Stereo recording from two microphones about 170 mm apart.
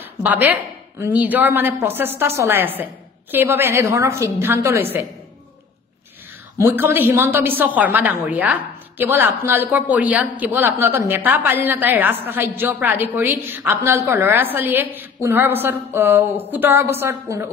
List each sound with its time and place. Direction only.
0.2 s a woman's voice: 10° right (ahead or behind)
6.6 s a woman's voice: 10° right (ahead or behind)